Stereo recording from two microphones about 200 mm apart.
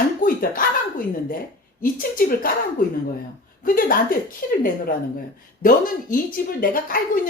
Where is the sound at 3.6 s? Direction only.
45° left (ahead or behind).